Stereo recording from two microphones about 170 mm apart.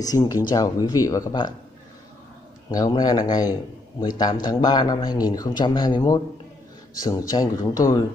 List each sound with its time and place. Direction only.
0.0 s speech: 20° left (ahead or behind)
2.7 s speech: 25° left (ahead or behind)